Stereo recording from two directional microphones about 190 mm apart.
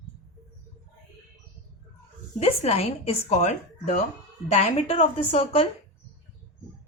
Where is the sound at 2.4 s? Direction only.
35° left (ahead or behind).